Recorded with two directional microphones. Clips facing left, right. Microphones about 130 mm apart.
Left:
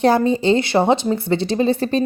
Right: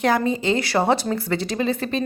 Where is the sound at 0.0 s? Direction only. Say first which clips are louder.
Left 5 dB; 30° left (ahead or behind).